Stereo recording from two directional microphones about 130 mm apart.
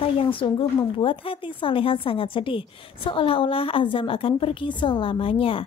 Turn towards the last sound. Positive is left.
turn(degrees=45)  # may be behind; listen again after turning